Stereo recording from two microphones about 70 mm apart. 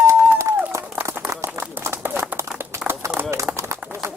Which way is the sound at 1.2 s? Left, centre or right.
Right.